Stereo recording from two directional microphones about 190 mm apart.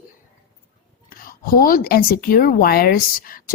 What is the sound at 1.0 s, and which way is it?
Speech, 50° left (ahead or behind).